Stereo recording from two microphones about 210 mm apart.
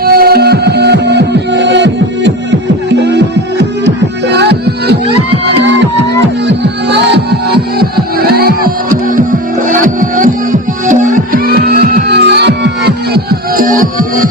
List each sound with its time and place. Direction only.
0.0 s music: 45° right (ahead or behind)
6.5 s music: 55° right (ahead or behind)